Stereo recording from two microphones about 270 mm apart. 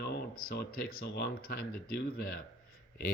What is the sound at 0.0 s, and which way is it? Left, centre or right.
Speech, left.